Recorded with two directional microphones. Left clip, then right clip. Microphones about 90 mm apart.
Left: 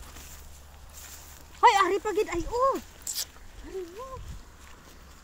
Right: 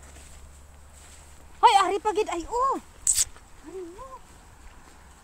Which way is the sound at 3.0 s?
90° right.